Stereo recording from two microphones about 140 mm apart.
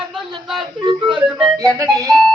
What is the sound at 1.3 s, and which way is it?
Speech, 5° right (ahead or behind).